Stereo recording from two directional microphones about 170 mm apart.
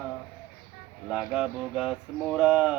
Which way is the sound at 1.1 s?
5° right (ahead or behind).